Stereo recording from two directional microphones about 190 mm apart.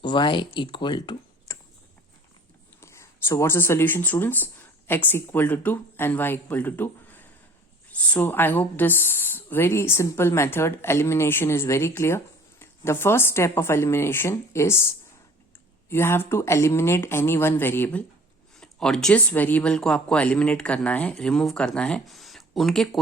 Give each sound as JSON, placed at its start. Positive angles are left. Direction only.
{"t": 0.0, "sound": "speech", "side_deg": 25}
{"t": 2.8, "sound": "speech", "side_deg": 15}